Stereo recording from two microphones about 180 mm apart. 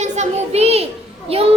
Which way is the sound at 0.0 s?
40° right (ahead or behind).